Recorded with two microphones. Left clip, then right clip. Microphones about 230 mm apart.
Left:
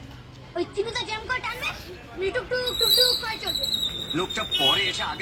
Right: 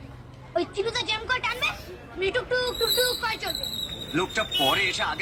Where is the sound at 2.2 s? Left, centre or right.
Right.